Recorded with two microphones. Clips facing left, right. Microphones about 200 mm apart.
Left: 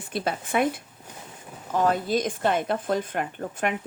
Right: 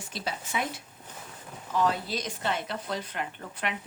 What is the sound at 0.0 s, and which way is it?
A woman's voice, 55° left (ahead or behind).